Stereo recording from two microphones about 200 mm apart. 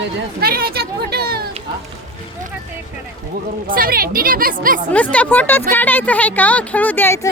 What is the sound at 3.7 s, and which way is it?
Speech, 45° right (ahead or behind).